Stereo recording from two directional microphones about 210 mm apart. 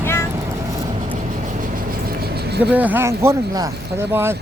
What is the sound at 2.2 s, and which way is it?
Vehicle, 50° right (ahead or behind).